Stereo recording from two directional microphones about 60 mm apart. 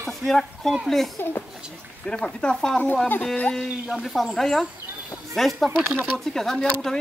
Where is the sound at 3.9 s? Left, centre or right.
Centre.